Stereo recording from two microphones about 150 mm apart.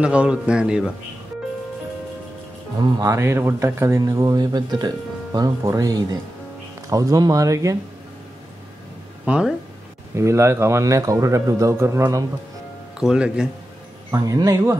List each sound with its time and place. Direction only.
0.0 s a man's voice: 5° right (ahead or behind)
2.8 s speech: 25° right (ahead or behind)
9.2 s speech: 5° right (ahead or behind)
10.1 s speech: 20° right (ahead or behind)
13.0 s speech: 5° right (ahead or behind)
14.1 s speech: 25° right (ahead or behind)